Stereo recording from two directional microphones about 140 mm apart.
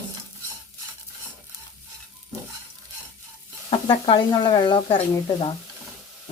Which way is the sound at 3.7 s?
40° left (ahead or behind).